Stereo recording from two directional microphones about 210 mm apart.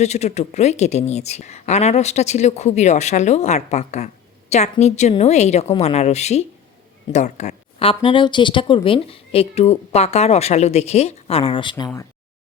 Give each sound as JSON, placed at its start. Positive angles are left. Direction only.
{"t": 0.0, "sound": "speech", "side_deg": 30}